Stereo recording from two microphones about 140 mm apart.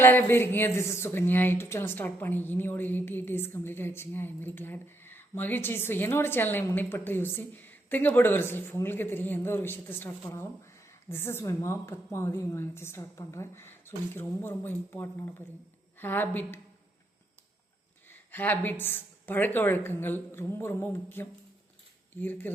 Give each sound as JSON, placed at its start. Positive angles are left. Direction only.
{"t": 0.0, "sound": "a woman's voice", "side_deg": 15}
{"t": 18.1, "sound": "a woman's voice", "side_deg": 15}